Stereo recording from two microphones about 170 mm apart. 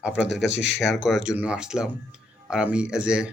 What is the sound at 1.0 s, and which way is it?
Speech, 5° right (ahead or behind).